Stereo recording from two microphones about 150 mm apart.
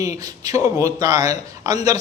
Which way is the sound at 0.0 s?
25° right (ahead or behind).